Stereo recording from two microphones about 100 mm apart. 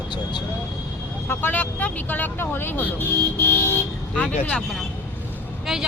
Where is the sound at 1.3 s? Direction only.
20° left (ahead or behind).